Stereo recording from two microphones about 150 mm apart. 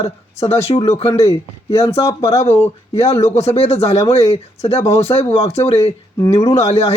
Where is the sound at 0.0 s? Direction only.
45° left (ahead or behind).